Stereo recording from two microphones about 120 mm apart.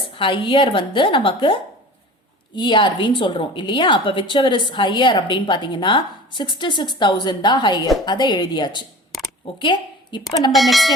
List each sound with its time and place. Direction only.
0.2 s a woman's voice: 45° left (ahead or behind)
2.6 s a woman's voice: 40° left (ahead or behind)
10.5 s speech: centre (ahead or behind)